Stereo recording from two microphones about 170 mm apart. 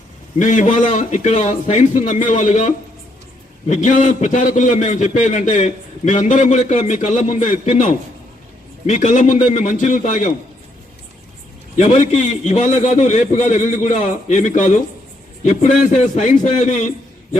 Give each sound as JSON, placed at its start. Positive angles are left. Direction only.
{"t": 0.3, "sound": "a man's voice", "side_deg": 45}
{"t": 11.8, "sound": "a man's voice", "side_deg": 45}